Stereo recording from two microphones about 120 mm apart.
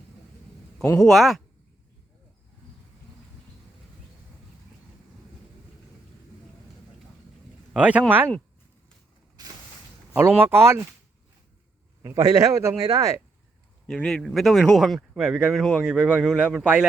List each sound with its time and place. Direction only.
0.9 s speech: 5° left (ahead or behind)
7.7 s speech: 10° right (ahead or behind)
9.4 s a sound: 35° right (ahead or behind)
10.2 s a man's voice: 20° right (ahead or behind)
12.0 s a man's voice: 30° right (ahead or behind)
13.8 s speech: 5° left (ahead or behind)